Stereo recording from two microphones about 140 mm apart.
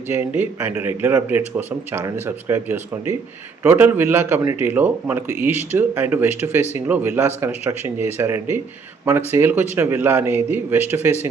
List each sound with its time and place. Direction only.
0.1 s speech: 15° right (ahead or behind)